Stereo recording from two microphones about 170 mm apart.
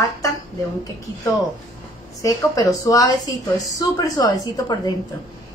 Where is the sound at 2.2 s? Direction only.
20° left (ahead or behind).